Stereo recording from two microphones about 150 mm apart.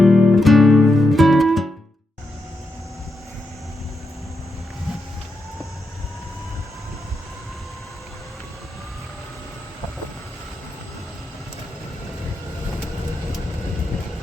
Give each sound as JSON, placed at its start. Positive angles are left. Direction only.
{"t": 0.0, "sound": "music", "side_deg": 0}